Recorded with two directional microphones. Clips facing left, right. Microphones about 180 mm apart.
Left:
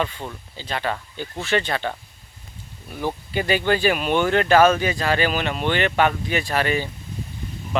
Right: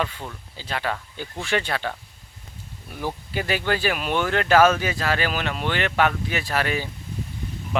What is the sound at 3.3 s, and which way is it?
Speech, centre (ahead or behind).